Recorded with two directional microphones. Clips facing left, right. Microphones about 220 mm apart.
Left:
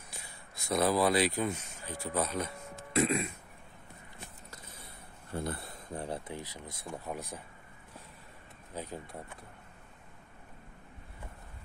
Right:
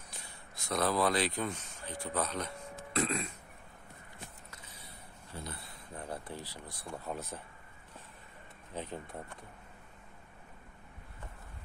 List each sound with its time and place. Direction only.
0.1 s speech: 10° left (ahead or behind)
5.3 s speech: 55° left (ahead or behind)
5.9 s speech: 30° left (ahead or behind); by 7.4 s 15° left (ahead or behind)
8.7 s speech: 5° left (ahead or behind)